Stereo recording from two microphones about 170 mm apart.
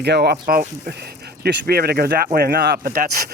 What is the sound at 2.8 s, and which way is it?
Speech, 55° right (ahead or behind).